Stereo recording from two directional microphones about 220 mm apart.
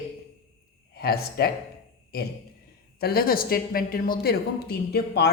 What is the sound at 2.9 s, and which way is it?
Speech, 45° left (ahead or behind).